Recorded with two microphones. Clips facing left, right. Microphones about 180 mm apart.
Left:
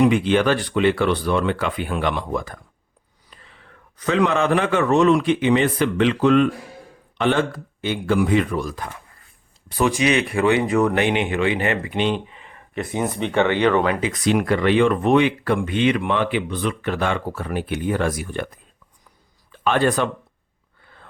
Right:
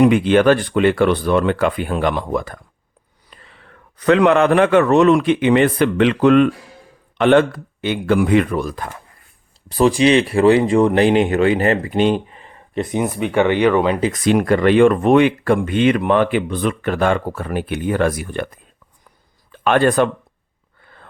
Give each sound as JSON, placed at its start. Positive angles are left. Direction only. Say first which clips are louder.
{"t": 0.0, "sound": "speech", "louder": "right 4 dB", "side_deg": -55}
{"t": 3.3, "sound": "whispering", "louder": "right 3 dB", "side_deg": -65}
{"t": 3.9, "sound": "a man's voice", "louder": "right 6 dB", "side_deg": -65}
{"t": 9.6, "sound": "speech", "louder": "right 6 dB", "side_deg": -35}
{"t": 13.1, "sound": "speech", "louder": "right 2 dB", "side_deg": -5}
{"t": 14.0, "sound": "speech", "louder": "right 4 dB", "side_deg": -50}
{"t": 19.5, "sound": "speech", "louder": "right 4 dB", "side_deg": -60}